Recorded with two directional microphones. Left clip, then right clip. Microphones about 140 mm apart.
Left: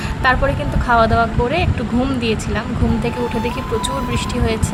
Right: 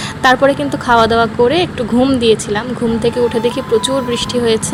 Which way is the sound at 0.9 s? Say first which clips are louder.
Right 3 dB; 35° right (ahead or behind).